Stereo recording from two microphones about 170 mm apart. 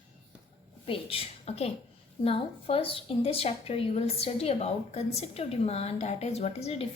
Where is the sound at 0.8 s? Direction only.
35° left (ahead or behind).